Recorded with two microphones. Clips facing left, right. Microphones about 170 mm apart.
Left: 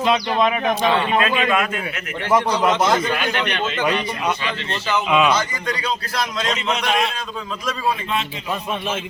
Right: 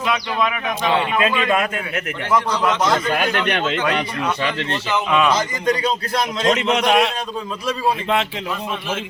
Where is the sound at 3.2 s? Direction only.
55° right (ahead or behind).